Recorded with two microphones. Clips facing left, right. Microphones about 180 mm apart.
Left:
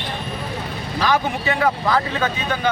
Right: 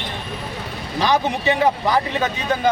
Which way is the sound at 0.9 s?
20° right (ahead or behind).